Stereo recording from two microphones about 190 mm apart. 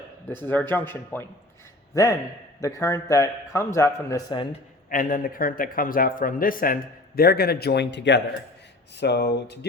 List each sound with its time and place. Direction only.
0.3 s speech: 10° left (ahead or behind)
2.6 s speech: 15° left (ahead or behind)
4.9 s a man's voice: 45° left (ahead or behind); by 9.6 s 60° left (ahead or behind)